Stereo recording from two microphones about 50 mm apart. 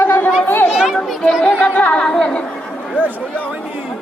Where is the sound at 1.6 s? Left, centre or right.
Left.